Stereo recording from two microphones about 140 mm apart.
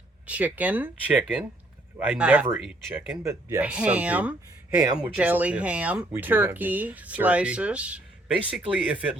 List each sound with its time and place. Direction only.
0.3 s speech: 10° right (ahead or behind)